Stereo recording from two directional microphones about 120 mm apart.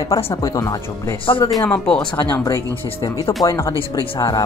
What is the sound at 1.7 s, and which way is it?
Speech, 10° left (ahead or behind).